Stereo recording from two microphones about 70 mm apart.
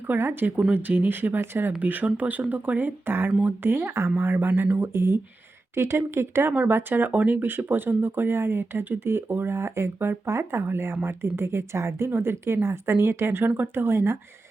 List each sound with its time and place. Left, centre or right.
0.1 s speech: right